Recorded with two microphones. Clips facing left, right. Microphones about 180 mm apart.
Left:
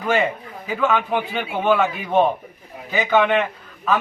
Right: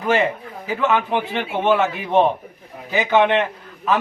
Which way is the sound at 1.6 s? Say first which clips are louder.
Even; 20° right (ahead or behind).